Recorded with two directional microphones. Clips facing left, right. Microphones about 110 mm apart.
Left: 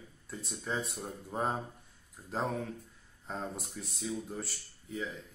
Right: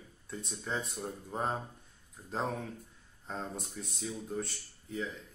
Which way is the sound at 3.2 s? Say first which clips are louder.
Left 1 dB; centre (ahead or behind).